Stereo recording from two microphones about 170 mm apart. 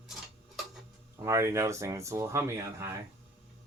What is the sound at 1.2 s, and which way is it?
Speech, 15° right (ahead or behind).